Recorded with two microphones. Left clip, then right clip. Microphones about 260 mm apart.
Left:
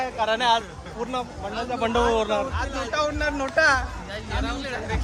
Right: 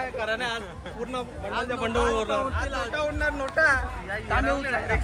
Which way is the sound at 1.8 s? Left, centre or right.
Centre.